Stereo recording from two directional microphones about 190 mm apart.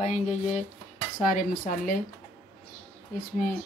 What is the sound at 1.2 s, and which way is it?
Dishes, 45° left (ahead or behind).